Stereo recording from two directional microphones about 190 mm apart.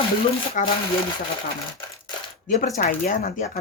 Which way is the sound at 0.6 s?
45° left (ahead or behind).